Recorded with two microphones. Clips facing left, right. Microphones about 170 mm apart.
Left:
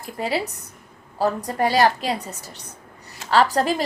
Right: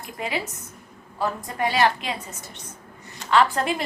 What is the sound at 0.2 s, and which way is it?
A woman's voice, 35° left (ahead or behind).